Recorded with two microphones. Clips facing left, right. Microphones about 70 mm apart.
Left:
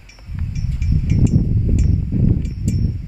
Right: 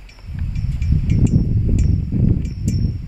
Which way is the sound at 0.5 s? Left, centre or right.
Centre.